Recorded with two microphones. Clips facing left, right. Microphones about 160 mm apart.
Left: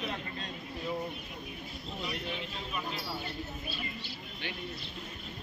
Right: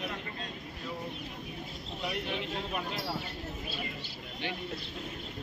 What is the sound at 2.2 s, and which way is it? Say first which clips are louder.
Vehicle: right 4 dB; 65° right (ahead or behind).